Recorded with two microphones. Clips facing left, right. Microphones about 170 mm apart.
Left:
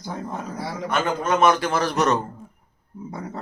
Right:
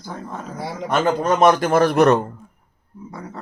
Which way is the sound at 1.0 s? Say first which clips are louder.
Right 4 dB; 40° right (ahead or behind).